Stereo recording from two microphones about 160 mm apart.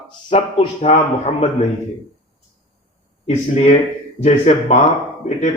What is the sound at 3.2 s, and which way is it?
Speech, 45° left (ahead or behind).